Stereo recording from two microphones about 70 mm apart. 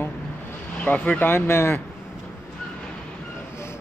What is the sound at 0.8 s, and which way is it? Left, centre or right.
Speech, centre.